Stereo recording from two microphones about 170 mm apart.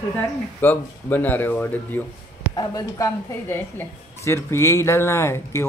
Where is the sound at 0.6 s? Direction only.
10° left (ahead or behind).